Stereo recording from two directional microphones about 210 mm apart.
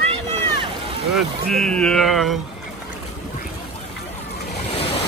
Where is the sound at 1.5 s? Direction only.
5° left (ahead or behind).